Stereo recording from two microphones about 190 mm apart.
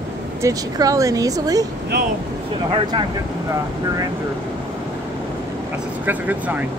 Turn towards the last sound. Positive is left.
turn(degrees=-10)  # may be behind; listen again after turning